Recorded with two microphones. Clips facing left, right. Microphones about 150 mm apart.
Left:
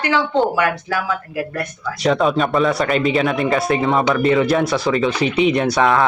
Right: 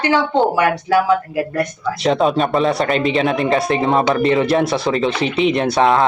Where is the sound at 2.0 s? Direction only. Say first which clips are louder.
Right 1 dB; 30° right (ahead or behind).